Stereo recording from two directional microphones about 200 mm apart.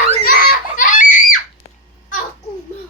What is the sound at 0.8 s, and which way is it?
Screaming, 40° left (ahead or behind).